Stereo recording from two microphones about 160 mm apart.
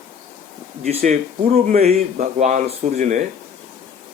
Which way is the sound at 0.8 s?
45° right (ahead or behind).